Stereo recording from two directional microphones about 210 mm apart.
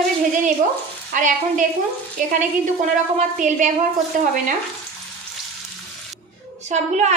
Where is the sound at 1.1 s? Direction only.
35° right (ahead or behind).